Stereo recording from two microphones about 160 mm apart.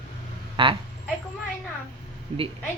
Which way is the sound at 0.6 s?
30° right (ahead or behind).